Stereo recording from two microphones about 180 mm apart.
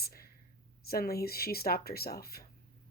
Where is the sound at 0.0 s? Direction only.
60° left (ahead or behind).